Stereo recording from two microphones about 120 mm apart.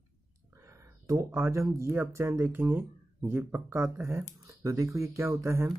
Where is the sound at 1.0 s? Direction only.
25° right (ahead or behind).